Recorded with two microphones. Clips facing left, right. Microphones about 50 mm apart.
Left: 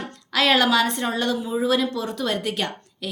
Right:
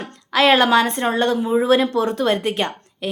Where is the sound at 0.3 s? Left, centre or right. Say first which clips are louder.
Right 4 dB; right.